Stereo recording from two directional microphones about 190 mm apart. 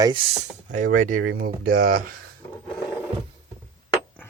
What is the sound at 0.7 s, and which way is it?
Speech, 40° right (ahead or behind).